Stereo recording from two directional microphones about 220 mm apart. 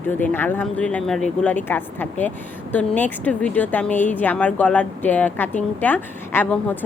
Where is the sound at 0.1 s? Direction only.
10° left (ahead or behind).